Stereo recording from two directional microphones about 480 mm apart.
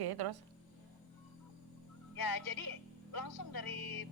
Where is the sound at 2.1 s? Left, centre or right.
Left.